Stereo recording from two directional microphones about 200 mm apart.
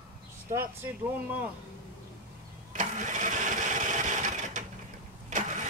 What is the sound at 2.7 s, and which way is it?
Engine, 40° right (ahead or behind).